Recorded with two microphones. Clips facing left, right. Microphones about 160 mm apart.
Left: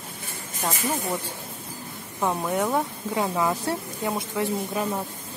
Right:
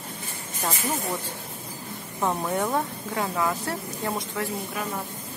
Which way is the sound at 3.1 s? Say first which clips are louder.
Left 2 dB; 20° left (ahead or behind).